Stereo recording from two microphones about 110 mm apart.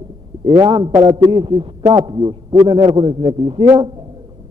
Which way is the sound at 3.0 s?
55° right (ahead or behind).